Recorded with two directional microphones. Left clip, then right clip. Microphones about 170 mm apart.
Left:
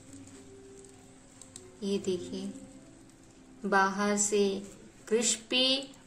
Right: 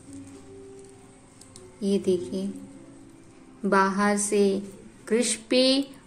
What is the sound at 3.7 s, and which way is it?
A woman's voice, 25° right (ahead or behind).